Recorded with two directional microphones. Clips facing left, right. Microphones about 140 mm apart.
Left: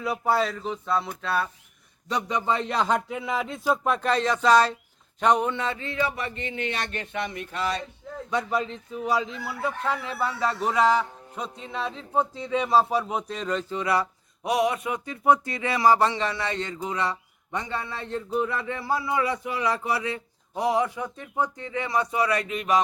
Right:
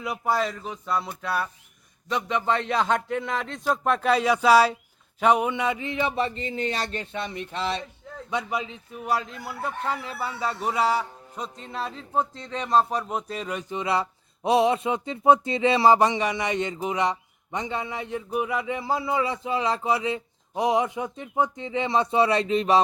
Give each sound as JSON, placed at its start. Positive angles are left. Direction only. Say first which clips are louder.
{"t": 0.4, "sound": "speech", "louder": "left 2 dB", "side_deg": -5}
{"t": 2.5, "sound": "a man's voice", "louder": "right 1 dB", "side_deg": 0}
{"t": 8.3, "sound": "a man's voice", "louder": "left 2 dB", "side_deg": -15}
{"t": 11.3, "sound": "a man's voice", "louder": "left 1 dB", "side_deg": 0}